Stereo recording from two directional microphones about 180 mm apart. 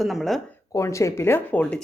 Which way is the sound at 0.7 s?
15° left (ahead or behind).